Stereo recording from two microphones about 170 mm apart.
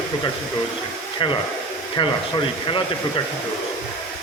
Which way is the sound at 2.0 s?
30° left (ahead or behind).